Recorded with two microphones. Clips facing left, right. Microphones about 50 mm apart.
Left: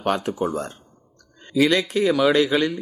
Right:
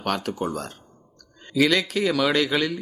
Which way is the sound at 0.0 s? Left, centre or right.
Centre.